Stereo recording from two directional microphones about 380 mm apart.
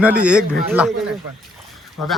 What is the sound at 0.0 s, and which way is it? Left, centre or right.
Speech, centre.